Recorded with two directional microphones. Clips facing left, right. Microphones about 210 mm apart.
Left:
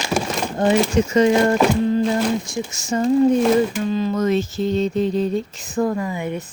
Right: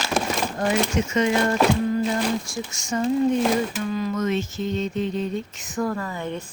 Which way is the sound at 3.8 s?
30° left (ahead or behind).